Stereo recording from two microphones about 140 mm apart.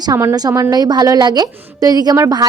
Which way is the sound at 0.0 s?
25° right (ahead or behind).